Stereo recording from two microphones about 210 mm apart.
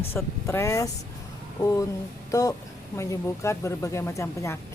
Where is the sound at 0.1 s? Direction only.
15° left (ahead or behind).